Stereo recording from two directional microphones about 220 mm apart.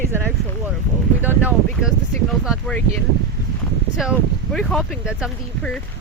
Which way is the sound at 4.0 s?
Centre (ahead or behind).